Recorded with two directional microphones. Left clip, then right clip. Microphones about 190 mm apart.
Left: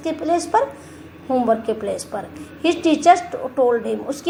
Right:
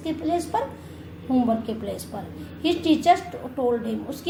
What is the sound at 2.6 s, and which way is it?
Speech, 45° left (ahead or behind).